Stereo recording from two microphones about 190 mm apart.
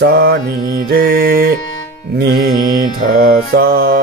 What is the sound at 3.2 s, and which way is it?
Music, 50° right (ahead or behind).